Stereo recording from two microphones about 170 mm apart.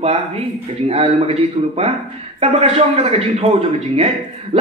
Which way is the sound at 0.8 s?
35° right (ahead or behind).